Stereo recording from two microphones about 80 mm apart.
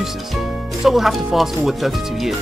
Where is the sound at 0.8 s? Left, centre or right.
Centre.